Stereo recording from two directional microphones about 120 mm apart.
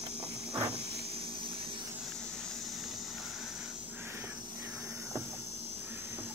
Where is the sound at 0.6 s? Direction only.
60° right (ahead or behind).